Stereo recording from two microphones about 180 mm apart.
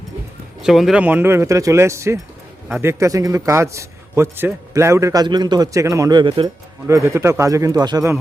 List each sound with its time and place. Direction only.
0.6 s a man's voice: centre (ahead or behind); by 6.5 s 25° right (ahead or behind)
6.8 s a man's voice: 15° right (ahead or behind)